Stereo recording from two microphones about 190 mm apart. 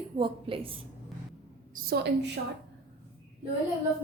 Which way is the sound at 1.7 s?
60° right (ahead or behind).